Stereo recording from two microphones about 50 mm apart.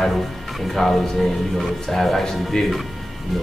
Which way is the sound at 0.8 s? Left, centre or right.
Centre.